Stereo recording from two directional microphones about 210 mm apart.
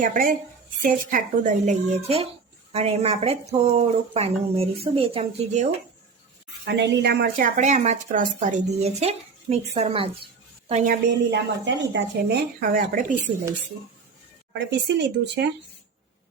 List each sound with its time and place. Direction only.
0.0 s a woman's voice: 40° right (ahead or behind)
6.7 s a woman's voice: 55° right (ahead or behind); by 10.9 s 30° right (ahead or behind)
11.3 s speech: 55° right (ahead or behind); by 13.3 s 40° right (ahead or behind)
14.7 s speech: 55° right (ahead or behind)